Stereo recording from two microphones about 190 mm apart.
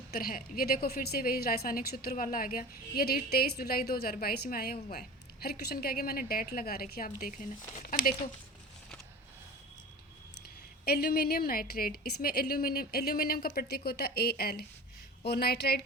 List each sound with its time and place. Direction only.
0.1 s a woman's voice: 50° left (ahead or behind)
10.8 s a woman's voice: 55° left (ahead or behind)